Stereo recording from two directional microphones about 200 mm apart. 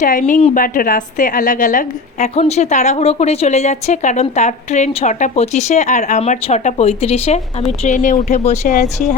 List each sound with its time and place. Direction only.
0.0 s a woman's voice: 40° left (ahead or behind)